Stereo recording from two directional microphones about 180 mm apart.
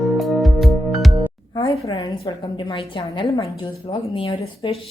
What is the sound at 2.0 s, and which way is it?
A woman's voice, 20° left (ahead or behind).